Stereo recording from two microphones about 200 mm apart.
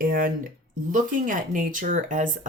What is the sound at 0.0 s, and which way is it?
Speech, 45° right (ahead or behind).